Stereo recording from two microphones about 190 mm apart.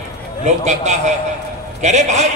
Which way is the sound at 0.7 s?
40° right (ahead or behind).